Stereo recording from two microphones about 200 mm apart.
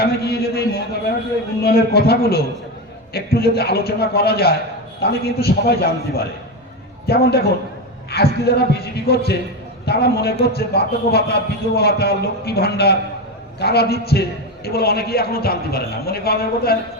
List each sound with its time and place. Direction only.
0.0 s a sound: 50° left (ahead or behind)
1.6 s a man's voice: 50° left (ahead or behind)
7.1 s a man's voice: 50° left (ahead or behind)